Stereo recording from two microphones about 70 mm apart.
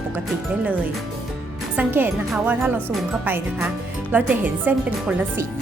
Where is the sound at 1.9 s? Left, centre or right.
Right.